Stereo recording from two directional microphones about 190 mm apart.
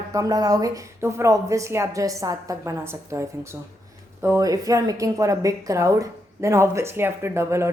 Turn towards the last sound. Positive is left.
turn(degrees=-15)  # may be behind; listen again after turning